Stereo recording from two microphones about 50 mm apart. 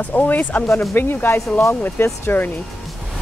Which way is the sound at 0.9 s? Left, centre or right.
Left.